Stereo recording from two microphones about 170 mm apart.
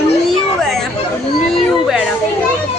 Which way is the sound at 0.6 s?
Centre (ahead or behind).